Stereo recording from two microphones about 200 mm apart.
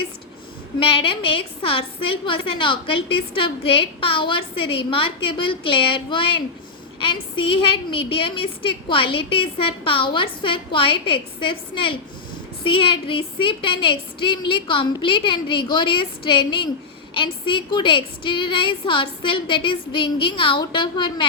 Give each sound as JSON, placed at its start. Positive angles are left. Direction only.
{"t": 0.8, "sound": "a woman's voice", "side_deg": 25}